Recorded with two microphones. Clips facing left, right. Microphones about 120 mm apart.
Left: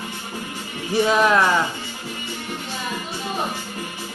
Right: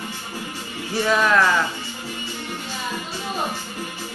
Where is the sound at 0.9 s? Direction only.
20° left (ahead or behind).